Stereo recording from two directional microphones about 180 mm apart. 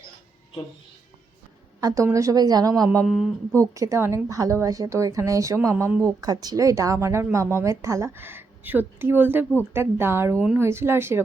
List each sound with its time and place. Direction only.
1.8 s a woman's voice: 15° right (ahead or behind)
3.1 s a sound: centre (ahead or behind)
3.8 s a woman's voice: 15° right (ahead or behind)